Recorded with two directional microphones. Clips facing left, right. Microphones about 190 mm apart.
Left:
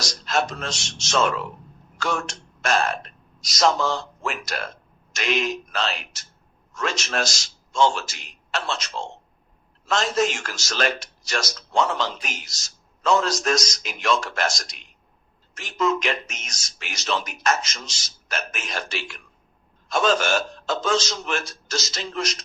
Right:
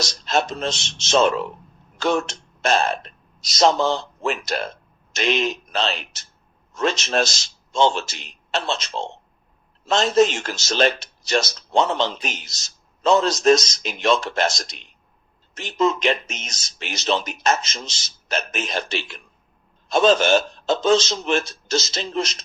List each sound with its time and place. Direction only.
0.0 s speech: 25° right (ahead or behind)